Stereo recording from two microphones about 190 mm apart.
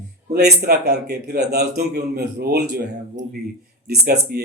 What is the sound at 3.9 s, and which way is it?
Speech, 55° right (ahead or behind).